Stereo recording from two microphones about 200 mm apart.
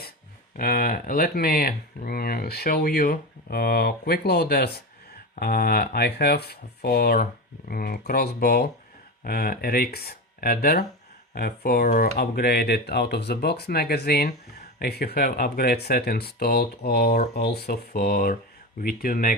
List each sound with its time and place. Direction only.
0.5 s speech: 45° left (ahead or behind)